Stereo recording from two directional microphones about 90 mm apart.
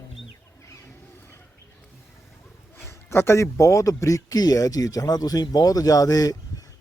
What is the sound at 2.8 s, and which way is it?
A man's voice, 30° left (ahead or behind).